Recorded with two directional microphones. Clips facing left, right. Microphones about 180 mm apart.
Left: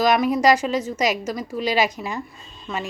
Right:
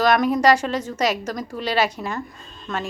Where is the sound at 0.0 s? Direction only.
10° left (ahead or behind).